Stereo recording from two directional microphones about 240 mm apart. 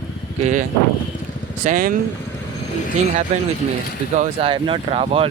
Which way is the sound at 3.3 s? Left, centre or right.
Right.